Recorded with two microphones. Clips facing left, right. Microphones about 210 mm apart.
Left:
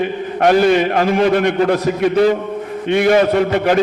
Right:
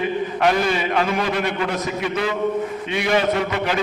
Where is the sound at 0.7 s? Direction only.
50° left (ahead or behind).